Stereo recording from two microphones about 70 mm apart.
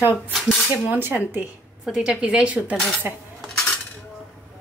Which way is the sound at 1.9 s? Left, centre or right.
Centre.